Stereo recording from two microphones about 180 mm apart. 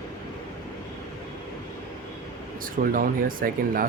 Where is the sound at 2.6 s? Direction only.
50° right (ahead or behind).